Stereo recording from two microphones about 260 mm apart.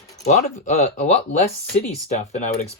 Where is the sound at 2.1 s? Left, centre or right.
Left.